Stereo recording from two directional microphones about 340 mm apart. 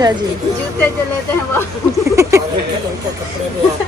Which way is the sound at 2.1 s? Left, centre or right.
Centre.